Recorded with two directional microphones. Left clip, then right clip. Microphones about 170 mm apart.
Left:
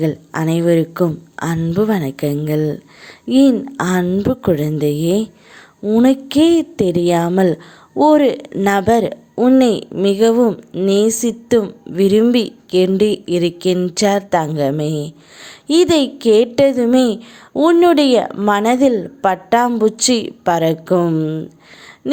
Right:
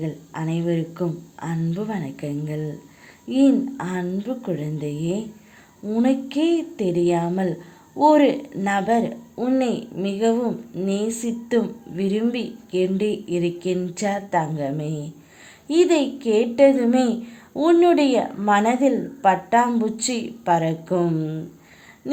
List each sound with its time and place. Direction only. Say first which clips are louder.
0.0 s a woman's voice: left 11 dB; 40° left (ahead or behind)